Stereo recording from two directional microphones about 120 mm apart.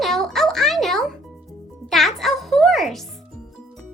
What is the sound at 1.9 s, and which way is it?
Music, centre (ahead or behind).